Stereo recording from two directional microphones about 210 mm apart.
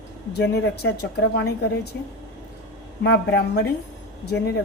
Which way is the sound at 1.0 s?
50° left (ahead or behind).